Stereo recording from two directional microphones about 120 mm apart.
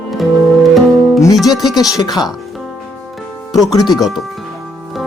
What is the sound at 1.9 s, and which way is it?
Speech, 35° left (ahead or behind).